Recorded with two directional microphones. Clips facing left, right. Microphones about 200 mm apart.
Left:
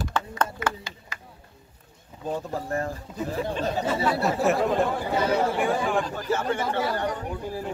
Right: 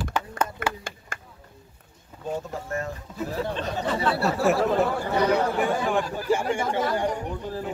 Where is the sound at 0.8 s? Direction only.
50° right (ahead or behind).